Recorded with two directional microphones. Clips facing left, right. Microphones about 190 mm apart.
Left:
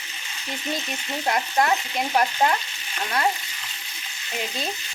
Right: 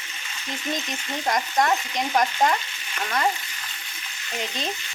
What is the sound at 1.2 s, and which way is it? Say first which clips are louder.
Frying: even; 5° left (ahead or behind).